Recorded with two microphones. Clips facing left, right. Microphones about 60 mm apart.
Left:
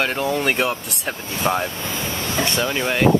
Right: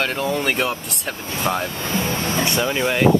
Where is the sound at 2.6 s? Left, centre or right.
Centre.